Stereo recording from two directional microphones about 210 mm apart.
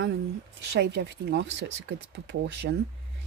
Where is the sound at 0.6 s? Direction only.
55° right (ahead or behind).